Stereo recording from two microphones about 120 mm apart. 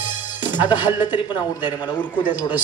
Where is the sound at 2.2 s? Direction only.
15° right (ahead or behind).